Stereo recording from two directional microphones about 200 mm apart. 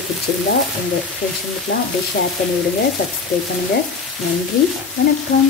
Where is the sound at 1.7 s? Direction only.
60° left (ahead or behind).